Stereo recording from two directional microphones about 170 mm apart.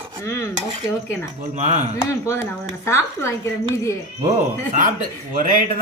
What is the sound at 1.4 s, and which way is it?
Speech, 45° right (ahead or behind).